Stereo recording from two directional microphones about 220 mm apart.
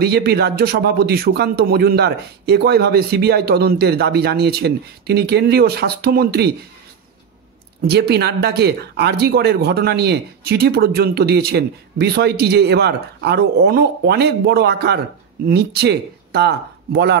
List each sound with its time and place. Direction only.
0.0 s speech: 45° right (ahead or behind)
7.9 s speech: 50° right (ahead or behind)